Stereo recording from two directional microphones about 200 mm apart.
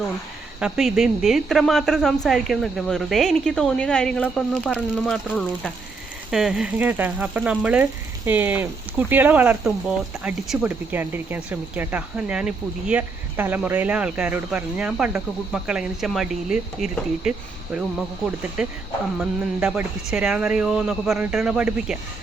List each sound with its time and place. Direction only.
0.6 s a woman's voice: centre (ahead or behind)